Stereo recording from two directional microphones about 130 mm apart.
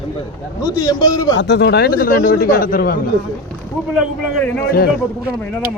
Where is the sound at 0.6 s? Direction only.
30° left (ahead or behind).